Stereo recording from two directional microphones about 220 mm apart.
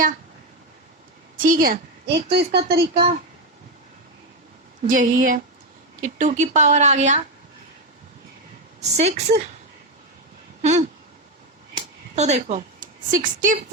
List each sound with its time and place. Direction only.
1.4 s a woman's voice: 40° right (ahead or behind)
4.9 s speech: 35° right (ahead or behind)
8.8 s a woman's voice: 30° right (ahead or behind)
10.6 s a sound: 30° right (ahead or behind)
12.1 s speech: 30° right (ahead or behind)